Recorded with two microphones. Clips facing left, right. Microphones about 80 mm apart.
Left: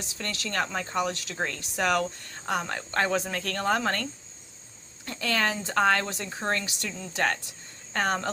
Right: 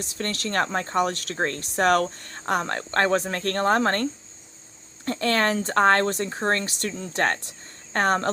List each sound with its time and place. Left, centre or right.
0.0 s speech: right